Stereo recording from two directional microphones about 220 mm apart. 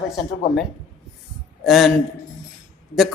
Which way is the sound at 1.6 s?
Centre (ahead or behind).